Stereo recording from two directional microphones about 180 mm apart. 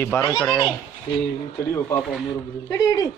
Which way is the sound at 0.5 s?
Centre (ahead or behind).